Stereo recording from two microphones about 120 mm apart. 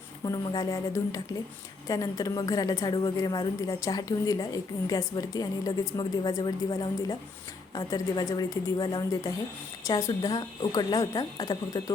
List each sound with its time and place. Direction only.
0.3 s a woman's voice: 30° left (ahead or behind)